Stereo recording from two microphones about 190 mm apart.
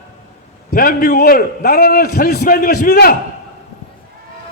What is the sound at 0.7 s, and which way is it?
A man's voice, 50° left (ahead or behind).